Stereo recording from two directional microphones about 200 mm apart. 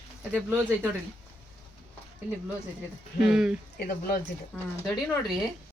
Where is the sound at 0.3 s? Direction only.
10° right (ahead or behind).